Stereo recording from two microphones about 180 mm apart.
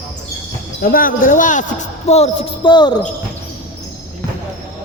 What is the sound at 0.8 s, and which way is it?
A woman's voice, 50° left (ahead or behind).